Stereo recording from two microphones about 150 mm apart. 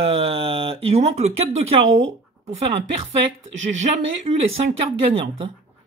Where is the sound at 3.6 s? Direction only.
50° right (ahead or behind).